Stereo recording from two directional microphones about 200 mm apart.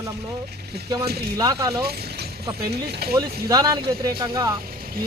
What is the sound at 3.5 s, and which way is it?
Speech, 15° right (ahead or behind).